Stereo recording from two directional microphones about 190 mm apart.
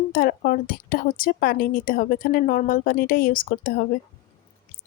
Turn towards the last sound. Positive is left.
turn(degrees=50)  # may be behind; listen again after turning